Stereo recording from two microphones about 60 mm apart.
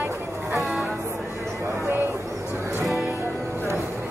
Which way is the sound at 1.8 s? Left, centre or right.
Right.